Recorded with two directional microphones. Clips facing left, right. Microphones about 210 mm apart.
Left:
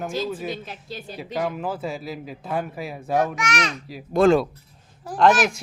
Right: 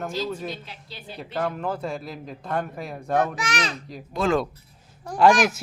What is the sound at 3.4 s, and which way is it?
Speech, 30° right (ahead or behind).